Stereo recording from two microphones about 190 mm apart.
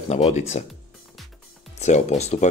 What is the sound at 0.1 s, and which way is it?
Speech, 35° left (ahead or behind).